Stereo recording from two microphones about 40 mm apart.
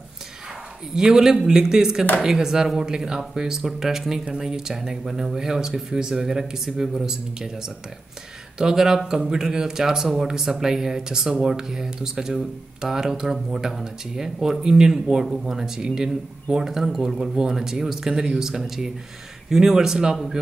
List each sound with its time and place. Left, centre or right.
0.9 s speech: centre